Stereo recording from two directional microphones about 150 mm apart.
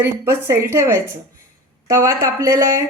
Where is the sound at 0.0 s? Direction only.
15° right (ahead or behind).